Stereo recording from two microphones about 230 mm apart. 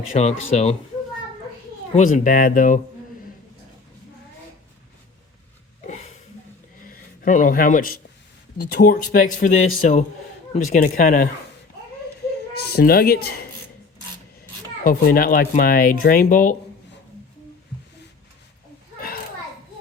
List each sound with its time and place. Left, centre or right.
0.1 s speech: left
2.0 s speech: left
5.8 s a sound: left
6.8 s speech: left
12.5 s speech: left
14.8 s speech: left
18.9 s children playing: left